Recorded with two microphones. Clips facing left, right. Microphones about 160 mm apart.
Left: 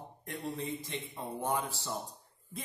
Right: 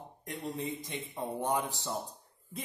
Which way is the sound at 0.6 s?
20° right (ahead or behind).